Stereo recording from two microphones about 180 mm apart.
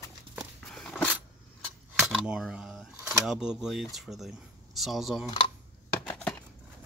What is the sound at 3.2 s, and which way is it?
Speech, 5° right (ahead or behind).